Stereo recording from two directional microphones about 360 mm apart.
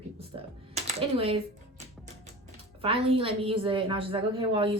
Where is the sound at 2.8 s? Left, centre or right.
Centre.